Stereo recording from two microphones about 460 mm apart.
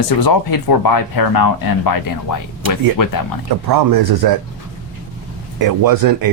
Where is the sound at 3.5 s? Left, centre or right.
Right.